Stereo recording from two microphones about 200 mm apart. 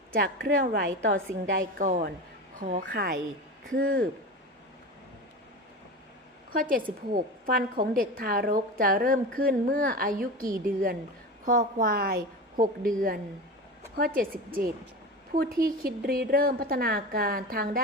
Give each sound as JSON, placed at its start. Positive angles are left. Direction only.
{"t": 0.2, "sound": "a woman's voice", "side_deg": -50}
{"t": 1.5, "sound": "a woman's voice", "side_deg": -40}
{"t": 6.5, "sound": "a woman's voice", "side_deg": -45}
{"t": 13.9, "sound": "a woman's voice", "side_deg": -45}